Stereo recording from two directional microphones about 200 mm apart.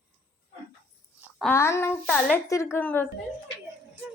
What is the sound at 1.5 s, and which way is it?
Speech, 15° left (ahead or behind).